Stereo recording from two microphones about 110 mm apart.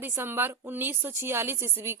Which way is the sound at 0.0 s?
20° right (ahead or behind).